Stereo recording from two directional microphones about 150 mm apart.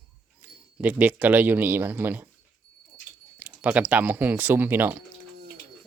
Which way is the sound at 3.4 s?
10° right (ahead or behind).